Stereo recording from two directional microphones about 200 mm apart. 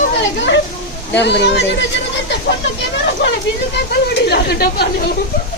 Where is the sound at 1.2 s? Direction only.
60° left (ahead or behind).